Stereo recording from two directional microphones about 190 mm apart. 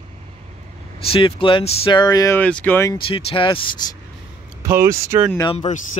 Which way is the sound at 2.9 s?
30° left (ahead or behind).